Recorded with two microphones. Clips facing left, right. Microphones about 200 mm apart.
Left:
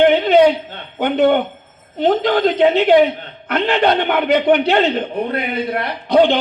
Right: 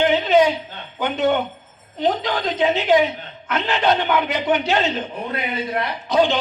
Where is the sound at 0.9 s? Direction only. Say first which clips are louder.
Left 6 dB; 55° left (ahead or behind).